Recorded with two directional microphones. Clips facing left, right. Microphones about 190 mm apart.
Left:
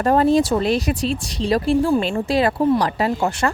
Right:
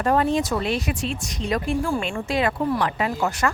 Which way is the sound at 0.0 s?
35° left (ahead or behind).